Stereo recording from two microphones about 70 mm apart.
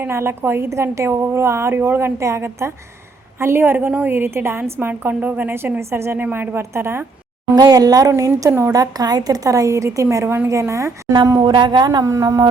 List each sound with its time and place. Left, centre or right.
0.0 s a woman's voice: right
5.8 s a woman's voice: right
7.5 s speech: right
8.1 s a woman's voice: right
10.5 s a woman's voice: right
11.3 s speech: right